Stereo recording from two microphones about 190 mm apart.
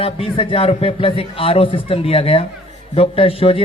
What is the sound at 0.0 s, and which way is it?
A man's voice, 30° left (ahead or behind).